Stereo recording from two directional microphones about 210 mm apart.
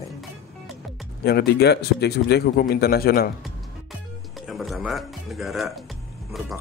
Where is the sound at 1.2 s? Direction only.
50° left (ahead or behind).